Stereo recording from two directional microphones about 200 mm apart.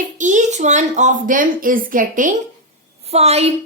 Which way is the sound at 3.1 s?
30° right (ahead or behind).